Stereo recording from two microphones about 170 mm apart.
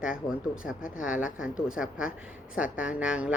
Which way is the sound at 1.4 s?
5° right (ahead or behind).